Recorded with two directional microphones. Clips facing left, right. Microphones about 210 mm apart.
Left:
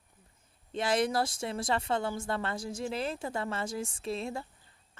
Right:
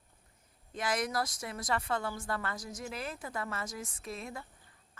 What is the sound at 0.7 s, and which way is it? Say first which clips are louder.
Speech: left 5 dB; 30° left (ahead or behind).